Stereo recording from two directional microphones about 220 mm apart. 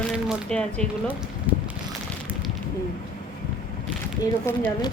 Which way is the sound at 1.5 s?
5° right (ahead or behind).